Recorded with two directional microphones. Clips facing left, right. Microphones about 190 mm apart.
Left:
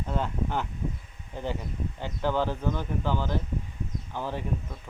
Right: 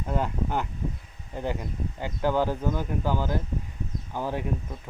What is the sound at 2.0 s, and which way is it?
Speech, 10° right (ahead or behind).